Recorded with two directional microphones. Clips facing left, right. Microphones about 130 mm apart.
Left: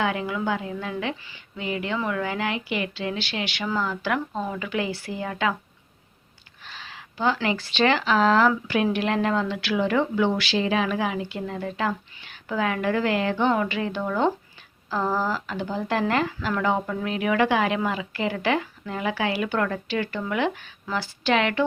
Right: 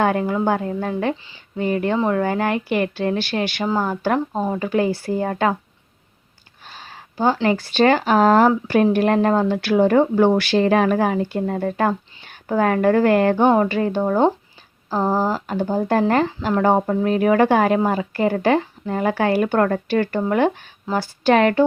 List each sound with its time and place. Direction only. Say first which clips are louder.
0.0 s speech: right 7 dB; 45° right (ahead or behind)
6.7 s a sound: right 3 dB; 45° right (ahead or behind)
7.4 s speech: right 8 dB; 45° right (ahead or behind)